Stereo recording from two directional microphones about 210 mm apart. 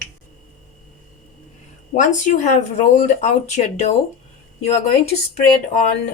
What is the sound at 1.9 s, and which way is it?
Speech, 35° left (ahead or behind).